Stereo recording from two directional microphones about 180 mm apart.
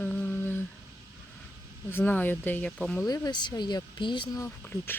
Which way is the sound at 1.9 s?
10° left (ahead or behind).